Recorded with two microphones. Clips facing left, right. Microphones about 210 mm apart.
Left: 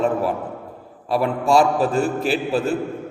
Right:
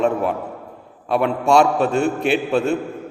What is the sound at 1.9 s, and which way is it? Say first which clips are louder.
Speech: right 2 dB; 35° left (ahead or behind).